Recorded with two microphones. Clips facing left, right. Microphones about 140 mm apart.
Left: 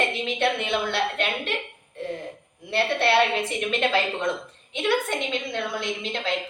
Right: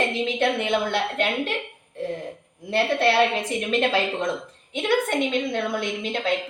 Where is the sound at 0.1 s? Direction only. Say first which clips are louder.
Right 2 dB; 40° right (ahead or behind).